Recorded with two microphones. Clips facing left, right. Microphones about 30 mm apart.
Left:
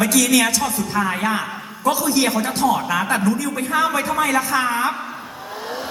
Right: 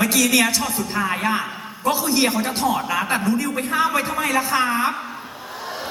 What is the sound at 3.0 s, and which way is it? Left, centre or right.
A man's voice, right.